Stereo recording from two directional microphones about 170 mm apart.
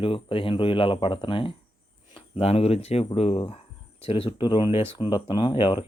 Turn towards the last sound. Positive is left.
turn(degrees=30)  # may be behind; listen again after turning